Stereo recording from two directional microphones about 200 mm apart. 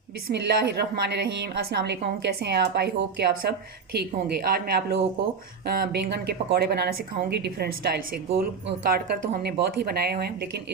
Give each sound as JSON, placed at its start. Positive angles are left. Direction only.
{"t": 0.3, "sound": "a woman's voice", "side_deg": -55}